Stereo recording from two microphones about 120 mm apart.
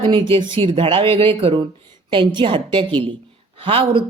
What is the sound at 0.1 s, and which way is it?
Speech, 45° right (ahead or behind).